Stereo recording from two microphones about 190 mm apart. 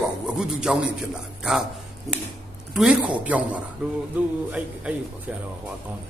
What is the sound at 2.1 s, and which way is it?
A woman's voice, centre (ahead or behind).